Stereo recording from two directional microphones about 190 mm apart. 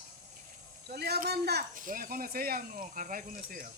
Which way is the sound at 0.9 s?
55° right (ahead or behind).